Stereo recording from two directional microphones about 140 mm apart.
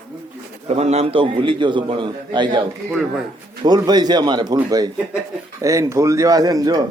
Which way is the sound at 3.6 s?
30° right (ahead or behind).